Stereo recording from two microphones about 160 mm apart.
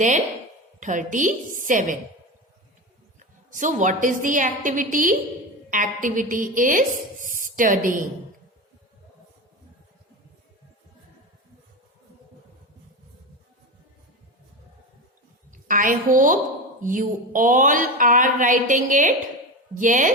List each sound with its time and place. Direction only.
0.8 s a woman's voice: 50° right (ahead or behind)
3.5 s a woman's voice: 50° right (ahead or behind)
15.6 s a woman's voice: 55° right (ahead or behind)